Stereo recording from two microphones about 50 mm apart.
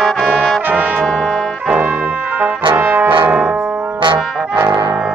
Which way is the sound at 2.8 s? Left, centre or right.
Right.